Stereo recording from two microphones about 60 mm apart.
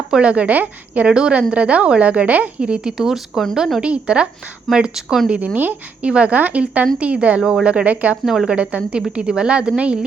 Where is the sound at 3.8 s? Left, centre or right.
Centre.